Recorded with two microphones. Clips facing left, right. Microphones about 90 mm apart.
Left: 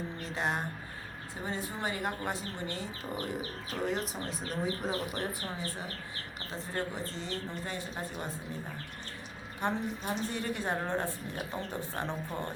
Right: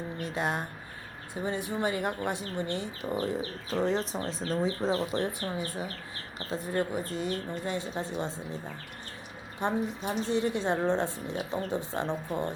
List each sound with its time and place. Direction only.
0.3 s speech: 20° right (ahead or behind)
6.7 s speech: 15° right (ahead or behind)
9.6 s speech: 20° right (ahead or behind)